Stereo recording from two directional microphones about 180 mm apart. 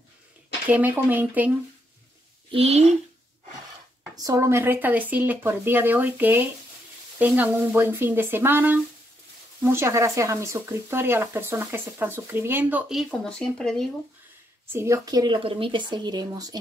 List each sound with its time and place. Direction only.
0.7 s speech: 10° right (ahead or behind)
2.5 s speech: 35° right (ahead or behind)
4.1 s speech: 20° right (ahead or behind); by 13.8 s 5° left (ahead or behind)
14.7 s speech: 15° right (ahead or behind)